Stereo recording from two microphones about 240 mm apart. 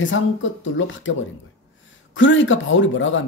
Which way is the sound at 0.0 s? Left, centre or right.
Left.